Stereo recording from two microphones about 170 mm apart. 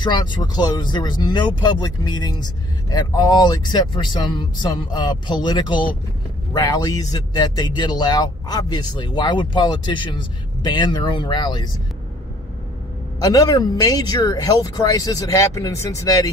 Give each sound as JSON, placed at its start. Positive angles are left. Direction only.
{"t": 0.0, "sound": "speech", "side_deg": 25}
{"t": 13.2, "sound": "speech", "side_deg": 20}